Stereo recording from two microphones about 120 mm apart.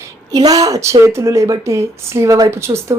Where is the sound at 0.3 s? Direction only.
30° right (ahead or behind).